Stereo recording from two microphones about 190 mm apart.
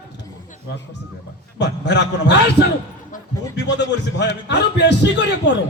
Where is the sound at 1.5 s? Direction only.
65° left (ahead or behind).